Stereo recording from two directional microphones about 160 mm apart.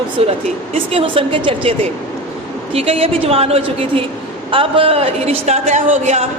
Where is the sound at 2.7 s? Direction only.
40° right (ahead or behind).